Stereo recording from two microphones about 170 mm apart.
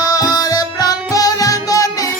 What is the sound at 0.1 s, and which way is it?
Music, 20° left (ahead or behind).